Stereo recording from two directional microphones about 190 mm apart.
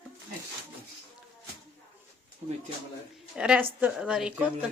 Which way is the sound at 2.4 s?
35° right (ahead or behind).